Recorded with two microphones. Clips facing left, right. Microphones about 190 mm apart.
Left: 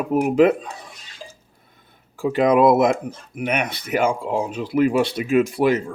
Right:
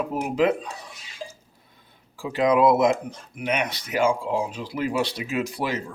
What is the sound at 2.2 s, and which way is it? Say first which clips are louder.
Speech: left 4 dB; 50° left (ahead or behind).